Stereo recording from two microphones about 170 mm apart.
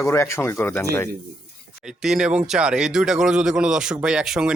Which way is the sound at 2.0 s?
5° right (ahead or behind).